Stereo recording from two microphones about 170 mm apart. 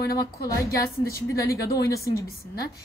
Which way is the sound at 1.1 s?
20° left (ahead or behind).